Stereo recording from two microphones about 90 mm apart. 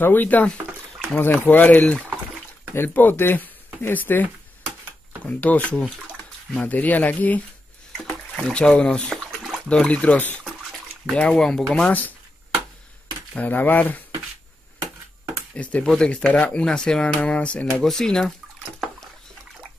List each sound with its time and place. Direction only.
0.0 s speech: 20° left (ahead or behind)
8.5 s speech: 10° left (ahead or behind)
13.3 s speech: 15° left (ahead or behind)
15.5 s speech: 15° left (ahead or behind)